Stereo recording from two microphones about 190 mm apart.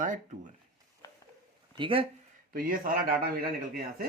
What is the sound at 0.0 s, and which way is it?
Speech, 40° right (ahead or behind).